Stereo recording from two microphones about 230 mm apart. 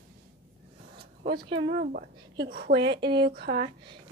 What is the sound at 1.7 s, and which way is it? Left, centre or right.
Speech, right.